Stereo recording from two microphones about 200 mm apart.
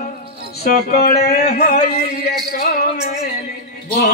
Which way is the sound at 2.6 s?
50° left (ahead or behind).